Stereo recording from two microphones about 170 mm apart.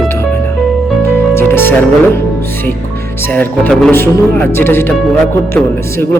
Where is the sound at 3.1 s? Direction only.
10° left (ahead or behind).